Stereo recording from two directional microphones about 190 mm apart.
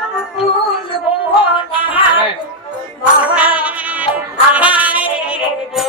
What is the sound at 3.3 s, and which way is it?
Music, 5° right (ahead or behind).